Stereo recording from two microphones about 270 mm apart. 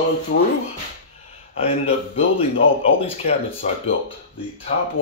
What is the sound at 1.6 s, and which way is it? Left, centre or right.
Speech, left.